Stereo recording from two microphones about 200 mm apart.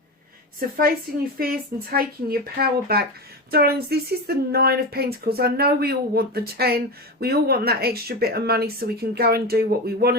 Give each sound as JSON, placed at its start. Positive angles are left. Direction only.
{"t": 1.4, "sound": "speech", "side_deg": -45}